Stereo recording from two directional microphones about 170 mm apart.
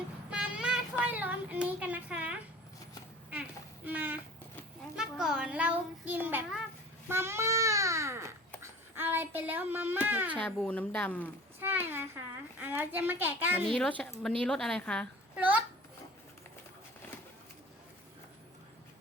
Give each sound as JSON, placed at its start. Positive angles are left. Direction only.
{"t": 0.3, "sound": "child singing", "side_deg": -5}
{"t": 3.8, "sound": "a sound", "side_deg": -10}
{"t": 4.9, "sound": "child singing", "side_deg": -5}
{"t": 7.1, "sound": "babbling", "side_deg": -15}
{"t": 8.6, "sound": "speech", "side_deg": -15}
{"t": 10.3, "sound": "a woman's voice", "side_deg": 10}
{"t": 11.6, "sound": "a child's voice", "side_deg": -10}
{"t": 13.7, "sound": "a woman's voice", "side_deg": 5}
{"t": 15.4, "sound": "a sound", "side_deg": -10}